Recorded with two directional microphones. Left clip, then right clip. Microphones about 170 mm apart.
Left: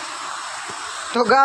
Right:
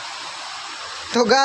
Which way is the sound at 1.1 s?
30° right (ahead or behind).